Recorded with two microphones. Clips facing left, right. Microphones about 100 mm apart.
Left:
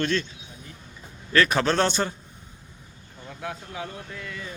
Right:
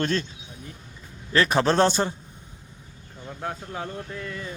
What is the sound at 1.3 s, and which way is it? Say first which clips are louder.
Speech: right 1 dB; 25° right (ahead or behind).